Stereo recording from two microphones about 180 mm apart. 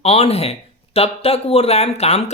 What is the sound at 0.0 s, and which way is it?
Speech, 35° left (ahead or behind).